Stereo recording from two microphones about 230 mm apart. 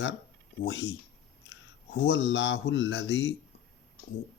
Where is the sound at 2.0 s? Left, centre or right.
Left.